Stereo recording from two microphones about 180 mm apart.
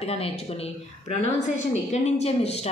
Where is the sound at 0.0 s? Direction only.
35° left (ahead or behind).